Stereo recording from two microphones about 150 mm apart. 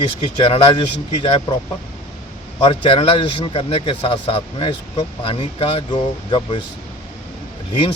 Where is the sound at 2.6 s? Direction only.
35° left (ahead or behind).